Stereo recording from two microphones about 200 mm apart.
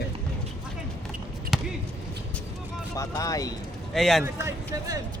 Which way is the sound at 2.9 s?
15° left (ahead or behind).